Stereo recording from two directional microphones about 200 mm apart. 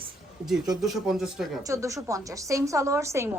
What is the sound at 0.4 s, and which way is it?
Speech, centre (ahead or behind).